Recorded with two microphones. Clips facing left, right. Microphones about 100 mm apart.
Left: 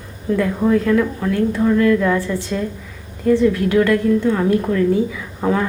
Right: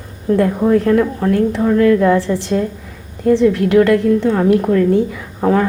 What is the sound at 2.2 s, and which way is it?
Speech, 60° right (ahead or behind).